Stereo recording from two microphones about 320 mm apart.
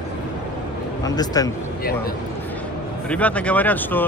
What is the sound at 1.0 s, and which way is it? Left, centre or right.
Speech, centre.